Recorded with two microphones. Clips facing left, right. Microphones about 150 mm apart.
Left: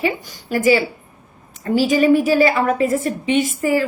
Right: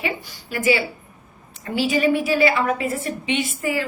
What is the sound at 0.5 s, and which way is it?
A woman's voice, 40° left (ahead or behind).